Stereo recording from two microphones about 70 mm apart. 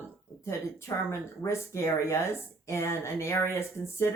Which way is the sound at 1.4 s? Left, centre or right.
Left.